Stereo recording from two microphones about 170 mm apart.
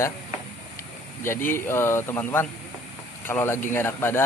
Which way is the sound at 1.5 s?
15° left (ahead or behind).